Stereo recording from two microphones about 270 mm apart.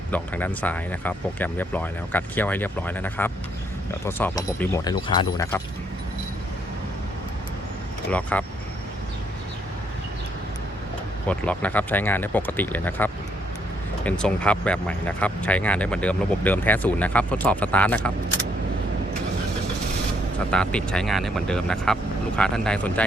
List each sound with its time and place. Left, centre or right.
0.1 s speech: centre
8.1 s speech: centre
11.3 s speech: centre
20.5 s speech: centre